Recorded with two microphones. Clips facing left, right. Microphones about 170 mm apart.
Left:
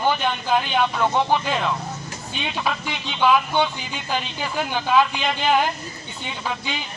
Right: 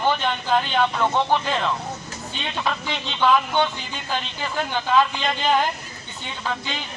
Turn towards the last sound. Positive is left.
turn(degrees=10)  # may be behind; listen again after turning